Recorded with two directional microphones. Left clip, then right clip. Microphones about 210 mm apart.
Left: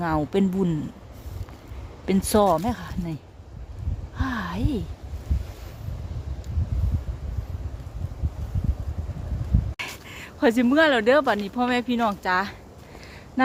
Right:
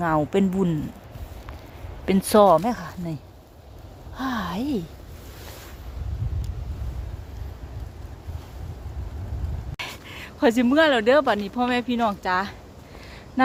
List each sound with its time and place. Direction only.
0.0 s speech: centre (ahead or behind)
2.0 s speech: centre (ahead or behind)
4.2 s speech: 5° right (ahead or behind)
9.7 s speech: centre (ahead or behind)